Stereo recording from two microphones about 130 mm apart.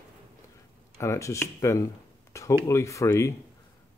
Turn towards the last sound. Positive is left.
turn(degrees=20)  # may be behind; listen again after turning